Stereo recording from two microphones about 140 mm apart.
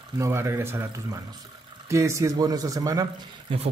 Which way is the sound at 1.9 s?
20° right (ahead or behind).